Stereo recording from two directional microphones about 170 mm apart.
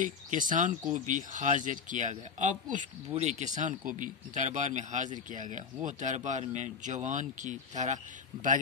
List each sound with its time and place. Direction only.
0.0 s speech: 50° right (ahead or behind)